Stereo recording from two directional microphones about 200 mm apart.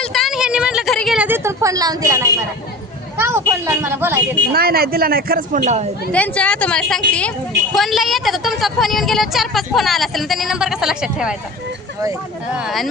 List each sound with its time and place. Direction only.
0.0 s a sound: centre (ahead or behind); by 2.3 s 15° right (ahead or behind)
3.2 s speech: 15° right (ahead or behind)
4.5 s a man's voice: 50° right (ahead or behind)
6.1 s a woman's voice: 5° left (ahead or behind)
12.5 s a woman's voice: centre (ahead or behind)